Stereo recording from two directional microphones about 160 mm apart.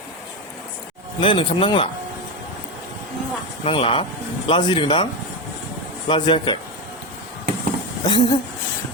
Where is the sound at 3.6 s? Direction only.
35° left (ahead or behind).